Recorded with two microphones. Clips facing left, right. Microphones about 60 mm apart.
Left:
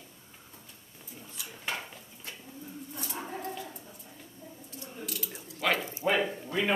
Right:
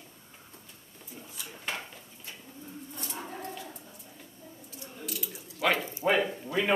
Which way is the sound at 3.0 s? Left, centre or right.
Centre.